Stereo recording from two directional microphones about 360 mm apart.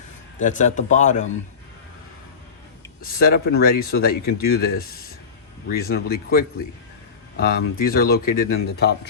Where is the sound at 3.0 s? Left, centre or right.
Left.